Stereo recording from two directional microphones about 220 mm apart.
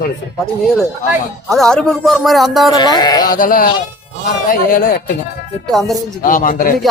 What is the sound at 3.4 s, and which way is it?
Speech, 40° left (ahead or behind).